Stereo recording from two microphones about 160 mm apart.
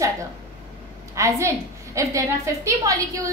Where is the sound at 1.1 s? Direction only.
20° right (ahead or behind).